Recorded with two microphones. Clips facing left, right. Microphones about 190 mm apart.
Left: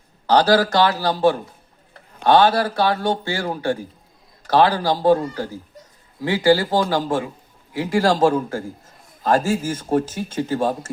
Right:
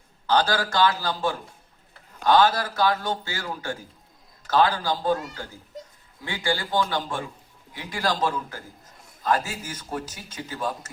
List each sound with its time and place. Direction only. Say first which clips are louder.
0.3 s speech: left 7 dB; 35° left (ahead or behind)
7.9 s speech: left 9 dB; 25° left (ahead or behind)
8.1 s a man's voice: left 10 dB; 45° left (ahead or behind)